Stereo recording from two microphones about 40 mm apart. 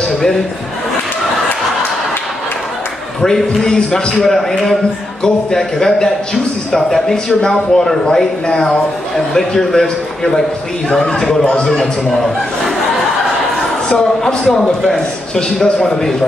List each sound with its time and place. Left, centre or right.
3.2 s a man's voice: centre
13.8 s a man's voice: centre